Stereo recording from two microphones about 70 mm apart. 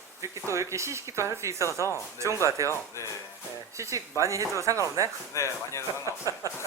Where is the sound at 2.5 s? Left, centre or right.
Right.